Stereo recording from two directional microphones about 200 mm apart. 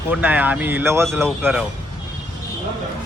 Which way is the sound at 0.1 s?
10° right (ahead or behind).